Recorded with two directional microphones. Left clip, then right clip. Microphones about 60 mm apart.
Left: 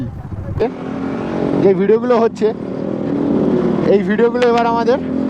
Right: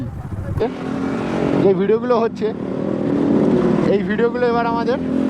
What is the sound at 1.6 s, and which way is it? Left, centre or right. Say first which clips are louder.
Speech: left 4 dB; left.